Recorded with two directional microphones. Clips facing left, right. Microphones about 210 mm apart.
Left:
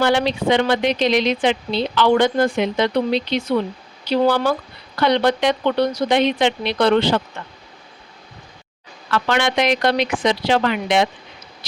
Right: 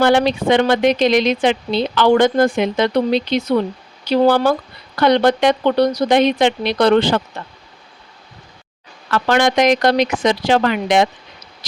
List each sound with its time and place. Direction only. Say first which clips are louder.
0.0 s speech: right 4 dB; 50° right (ahead or behind)
9.0 s speech: right 4 dB; 40° right (ahead or behind)